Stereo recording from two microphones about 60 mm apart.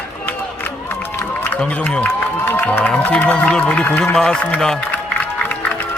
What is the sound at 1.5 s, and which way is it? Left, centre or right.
Speech, left.